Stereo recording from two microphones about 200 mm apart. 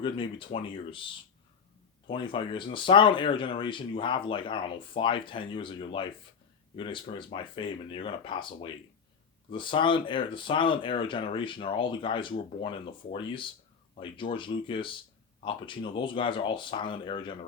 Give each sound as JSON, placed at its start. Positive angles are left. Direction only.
{"t": 0.0, "sound": "speech", "side_deg": 25}